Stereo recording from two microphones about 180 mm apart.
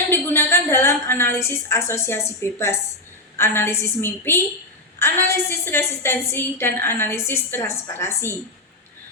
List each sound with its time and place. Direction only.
0.1 s a woman's voice: 10° left (ahead or behind)